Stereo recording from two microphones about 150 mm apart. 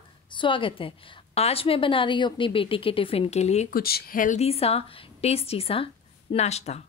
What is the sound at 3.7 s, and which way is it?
Speech, 90° left.